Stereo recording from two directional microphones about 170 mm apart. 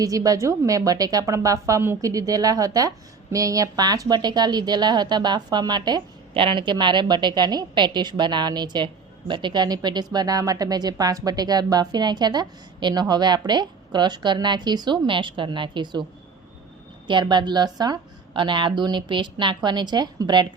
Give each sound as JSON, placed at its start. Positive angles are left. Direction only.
{"t": 0.0, "sound": "a woman's voice", "side_deg": -20}
{"t": 17.1, "sound": "a woman's voice", "side_deg": -25}